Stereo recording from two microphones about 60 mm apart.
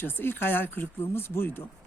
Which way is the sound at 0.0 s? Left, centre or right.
Left.